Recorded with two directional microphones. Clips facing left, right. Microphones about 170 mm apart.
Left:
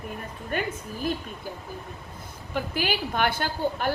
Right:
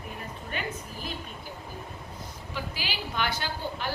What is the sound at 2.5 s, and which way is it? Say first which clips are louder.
A woman's voice: left 9 dB; 50° left (ahead or behind).